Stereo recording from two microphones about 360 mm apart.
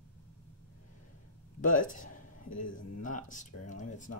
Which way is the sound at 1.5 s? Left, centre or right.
Left.